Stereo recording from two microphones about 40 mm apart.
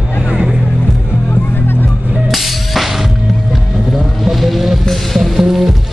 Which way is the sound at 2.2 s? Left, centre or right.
Centre.